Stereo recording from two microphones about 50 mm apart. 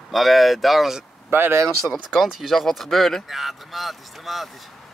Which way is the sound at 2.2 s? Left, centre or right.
Centre.